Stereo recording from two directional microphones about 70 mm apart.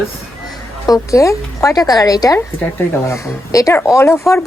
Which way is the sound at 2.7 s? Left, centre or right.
Left.